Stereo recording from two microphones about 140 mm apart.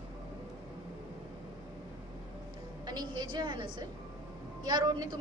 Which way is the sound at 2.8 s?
30° right (ahead or behind).